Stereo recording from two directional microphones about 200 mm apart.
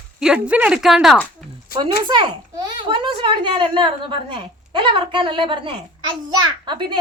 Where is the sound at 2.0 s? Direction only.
20° right (ahead or behind).